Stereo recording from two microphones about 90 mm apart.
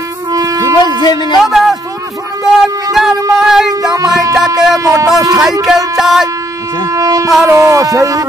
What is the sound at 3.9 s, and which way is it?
Music, 40° right (ahead or behind).